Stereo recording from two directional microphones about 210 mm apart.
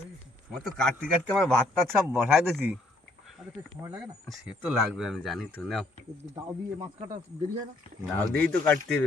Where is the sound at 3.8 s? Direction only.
15° right (ahead or behind).